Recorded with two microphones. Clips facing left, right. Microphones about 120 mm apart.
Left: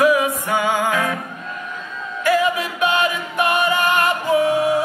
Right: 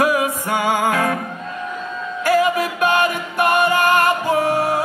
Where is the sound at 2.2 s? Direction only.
45° right (ahead or behind).